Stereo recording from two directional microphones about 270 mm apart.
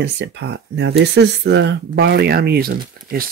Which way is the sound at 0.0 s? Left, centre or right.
Right.